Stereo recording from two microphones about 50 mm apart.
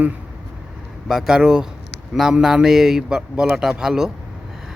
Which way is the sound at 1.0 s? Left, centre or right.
Centre.